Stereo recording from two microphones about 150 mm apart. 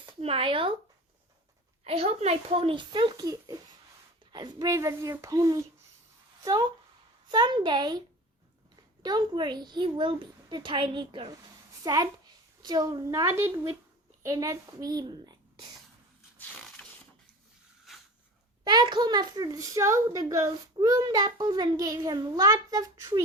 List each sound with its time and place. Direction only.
0.0 s speech: 40° right (ahead or behind)
1.8 s a woman's voice: 40° right (ahead or behind)
9.0 s a woman's voice: 30° right (ahead or behind)
17.9 s a sound: centre (ahead or behind)
18.6 s a child's voice: 30° right (ahead or behind)